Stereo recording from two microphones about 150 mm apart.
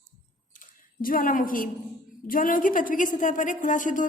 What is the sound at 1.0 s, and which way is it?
A woman's voice, 65° left (ahead or behind).